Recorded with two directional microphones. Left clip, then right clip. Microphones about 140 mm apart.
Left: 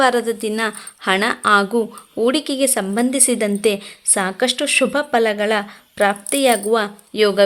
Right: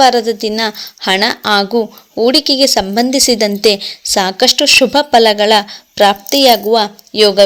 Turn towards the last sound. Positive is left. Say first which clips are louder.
# right 6 dB
turn(degrees=-15)  # may be behind; listen again after turning